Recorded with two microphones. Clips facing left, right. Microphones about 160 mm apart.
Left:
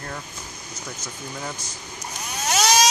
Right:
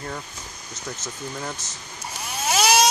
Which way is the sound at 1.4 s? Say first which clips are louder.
Even; centre (ahead or behind).